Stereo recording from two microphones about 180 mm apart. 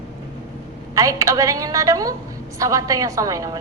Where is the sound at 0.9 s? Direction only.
20° right (ahead or behind).